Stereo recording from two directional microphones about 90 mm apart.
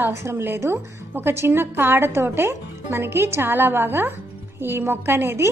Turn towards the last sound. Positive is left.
turn(degrees=-30)  # may be behind; listen again after turning